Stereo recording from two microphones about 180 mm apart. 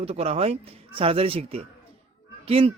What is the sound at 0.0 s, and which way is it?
A man's voice, 35° right (ahead or behind).